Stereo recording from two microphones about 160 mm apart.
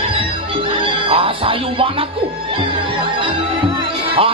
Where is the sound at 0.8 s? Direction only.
35° right (ahead or behind).